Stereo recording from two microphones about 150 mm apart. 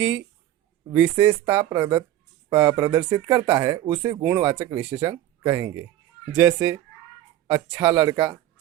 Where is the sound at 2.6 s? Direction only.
15° right (ahead or behind).